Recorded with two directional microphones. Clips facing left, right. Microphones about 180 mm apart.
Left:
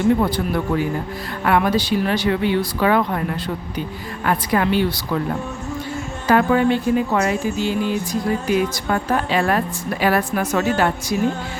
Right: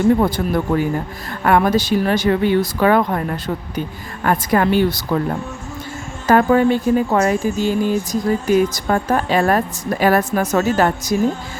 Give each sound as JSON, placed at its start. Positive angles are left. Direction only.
{"t": 0.2, "sound": "speech", "side_deg": -45}
{"t": 6.2, "sound": "speech", "side_deg": -40}